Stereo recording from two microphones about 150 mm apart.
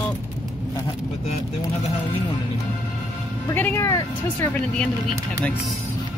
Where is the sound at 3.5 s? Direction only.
15° left (ahead or behind).